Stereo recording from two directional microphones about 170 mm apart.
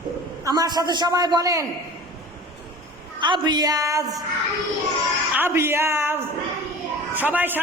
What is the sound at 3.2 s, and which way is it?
A man's voice, 25° right (ahead or behind).